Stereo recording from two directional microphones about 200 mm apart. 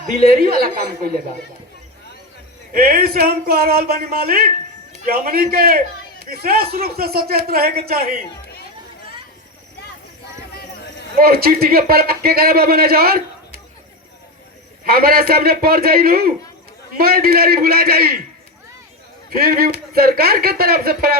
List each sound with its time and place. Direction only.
0.3 s a man's voice: 50° right (ahead or behind)
2.7 s a man's voice: 50° right (ahead or behind)
11.2 s a man's voice: 50° right (ahead or behind)
14.8 s a man's voice: 50° right (ahead or behind)
19.4 s a man's voice: 50° right (ahead or behind)